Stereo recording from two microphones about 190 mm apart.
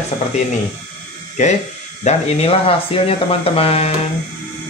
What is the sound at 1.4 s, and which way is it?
Speech, 40° left (ahead or behind).